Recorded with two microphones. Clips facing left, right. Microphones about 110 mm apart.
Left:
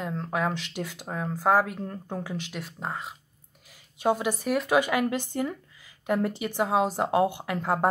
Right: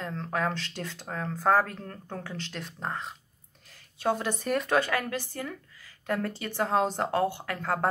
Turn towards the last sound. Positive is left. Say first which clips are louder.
# left 3 dB
turn(degrees=15)  # may be behind; listen again after turning